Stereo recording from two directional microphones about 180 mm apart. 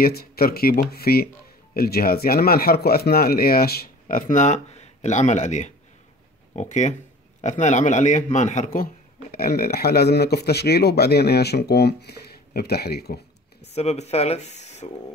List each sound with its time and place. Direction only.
0.0 s a man's voice: 55° left (ahead or behind)
13.7 s speech: 35° left (ahead or behind)